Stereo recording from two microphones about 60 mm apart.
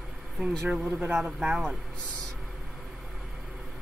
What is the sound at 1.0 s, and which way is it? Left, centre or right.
Speech, right.